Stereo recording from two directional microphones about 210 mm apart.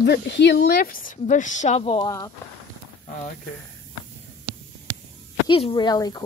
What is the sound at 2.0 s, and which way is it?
Speech, 15° left (ahead or behind).